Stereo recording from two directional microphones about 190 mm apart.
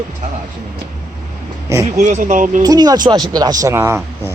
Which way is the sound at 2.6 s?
20° right (ahead or behind).